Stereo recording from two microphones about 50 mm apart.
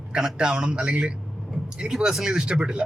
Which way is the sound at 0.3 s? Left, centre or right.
Centre.